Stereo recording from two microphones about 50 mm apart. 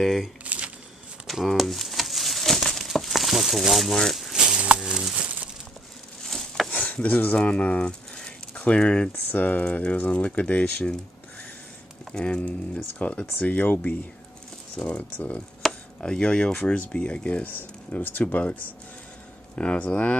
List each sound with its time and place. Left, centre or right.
0.0 s speech: centre
0.4 s a sound: right
1.5 s crumpling: centre
4.7 s a sound: centre
6.2 s a sound: centre
6.7 s a sound: left
7.3 s speech: left
9.3 s speech: left
12.1 s speech: centre
13.4 s speech: left
15.6 s chopping: centre
16.0 s speech: centre
17.5 s speech: left